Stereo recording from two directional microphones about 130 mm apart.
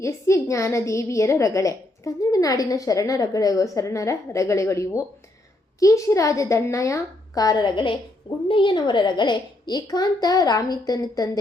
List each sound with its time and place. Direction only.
0.0 s a woman's voice: 25° left (ahead or behind)